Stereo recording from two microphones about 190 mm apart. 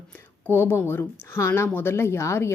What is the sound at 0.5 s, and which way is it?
Speech, 10° left (ahead or behind).